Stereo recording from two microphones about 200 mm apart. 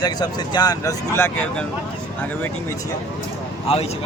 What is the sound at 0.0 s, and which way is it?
Speech, 20° left (ahead or behind).